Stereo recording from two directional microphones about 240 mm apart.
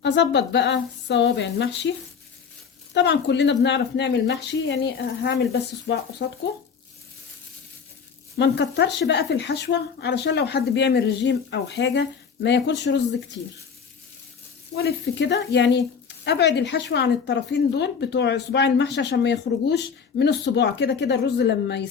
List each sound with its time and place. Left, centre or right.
0.0 s speech: left
2.9 s speech: left
8.4 s speech: left
14.8 s speech: left